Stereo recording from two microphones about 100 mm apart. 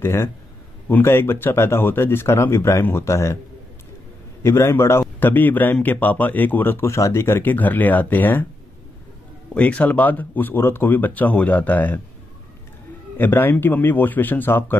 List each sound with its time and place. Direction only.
0.0 s a man's voice: 25° left (ahead or behind)
4.4 s a man's voice: 25° left (ahead or behind)
9.5 s speech: 15° left (ahead or behind)
13.2 s a man's voice: 20° left (ahead or behind)